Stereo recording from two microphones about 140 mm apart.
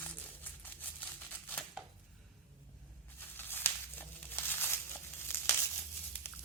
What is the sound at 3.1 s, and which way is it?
Crumpling, 15° left (ahead or behind).